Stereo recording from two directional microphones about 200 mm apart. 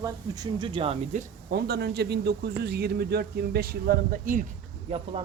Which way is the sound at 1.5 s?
55° right (ahead or behind).